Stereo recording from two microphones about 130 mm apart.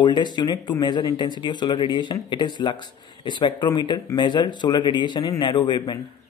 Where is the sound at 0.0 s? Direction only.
35° left (ahead or behind).